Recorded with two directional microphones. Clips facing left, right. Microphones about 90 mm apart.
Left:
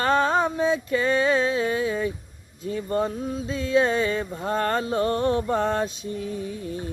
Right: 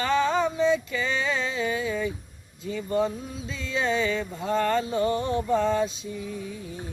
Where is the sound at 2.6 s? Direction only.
45° left (ahead or behind).